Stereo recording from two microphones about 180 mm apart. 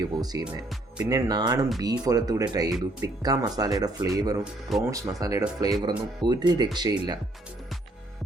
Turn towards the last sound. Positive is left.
turn(degrees=-25)  # may be behind; listen again after turning